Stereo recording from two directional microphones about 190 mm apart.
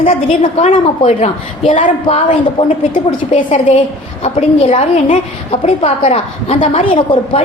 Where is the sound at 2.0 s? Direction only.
30° left (ahead or behind).